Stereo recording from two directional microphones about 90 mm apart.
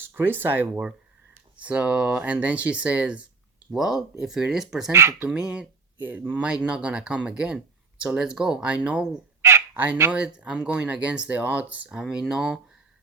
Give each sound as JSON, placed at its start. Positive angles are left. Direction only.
{"t": 0.0, "sound": "speech", "side_deg": -25}
{"t": 4.9, "sound": "speech", "side_deg": -30}
{"t": 5.3, "sound": "speech", "side_deg": -10}
{"t": 9.4, "sound": "fowl", "side_deg": -30}
{"t": 10.1, "sound": "speech", "side_deg": -10}